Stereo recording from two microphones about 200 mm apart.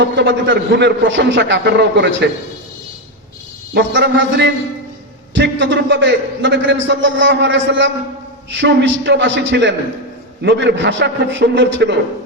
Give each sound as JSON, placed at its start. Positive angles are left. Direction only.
{"t": 0.0, "sound": "a man's voice", "side_deg": -65}
{"t": 3.8, "sound": "a man's voice", "side_deg": -60}